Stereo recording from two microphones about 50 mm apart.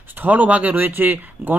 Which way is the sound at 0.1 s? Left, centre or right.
Right.